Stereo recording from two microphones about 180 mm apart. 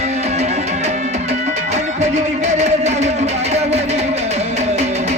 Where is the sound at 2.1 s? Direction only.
40° right (ahead or behind).